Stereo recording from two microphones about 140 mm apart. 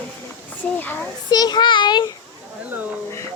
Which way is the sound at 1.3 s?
30° left (ahead or behind).